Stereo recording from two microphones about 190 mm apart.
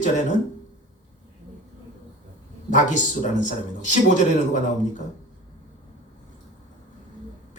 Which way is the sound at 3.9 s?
40° left (ahead or behind).